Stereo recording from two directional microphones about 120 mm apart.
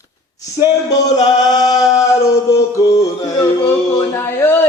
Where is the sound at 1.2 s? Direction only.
35° left (ahead or behind).